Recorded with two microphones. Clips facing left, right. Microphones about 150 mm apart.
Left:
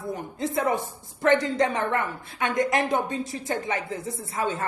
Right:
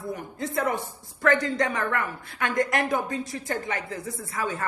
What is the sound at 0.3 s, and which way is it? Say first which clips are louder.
Speech: left 2 dB; 20° left (ahead or behind).